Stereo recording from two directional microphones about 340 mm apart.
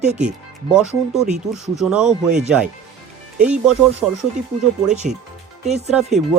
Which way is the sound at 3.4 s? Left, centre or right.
Centre.